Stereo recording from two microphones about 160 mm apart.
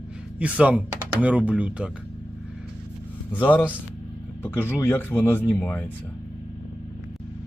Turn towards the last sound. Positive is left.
turn(degrees=10)  # may be behind; listen again after turning